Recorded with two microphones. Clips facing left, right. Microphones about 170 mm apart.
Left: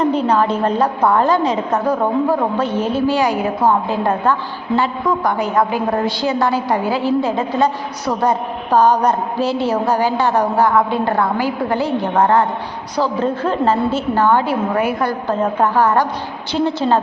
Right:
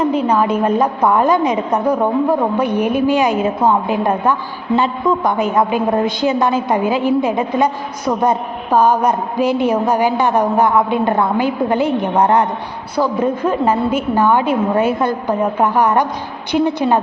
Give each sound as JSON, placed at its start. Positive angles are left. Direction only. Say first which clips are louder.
{"t": 0.0, "sound": "a woman's voice", "louder": "even", "side_deg": -10}
{"t": 8.7, "sound": "a woman's voice", "louder": "even", "side_deg": -10}